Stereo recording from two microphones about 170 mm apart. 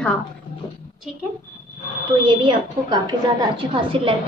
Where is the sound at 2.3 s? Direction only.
25° right (ahead or behind).